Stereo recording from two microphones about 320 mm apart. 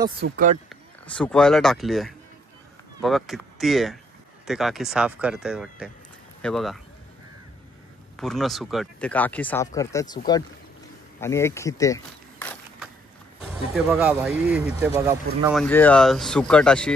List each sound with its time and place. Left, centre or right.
0.2 s speech: right
0.7 s speech: centre
8.2 s speech: centre
13.7 s speech: centre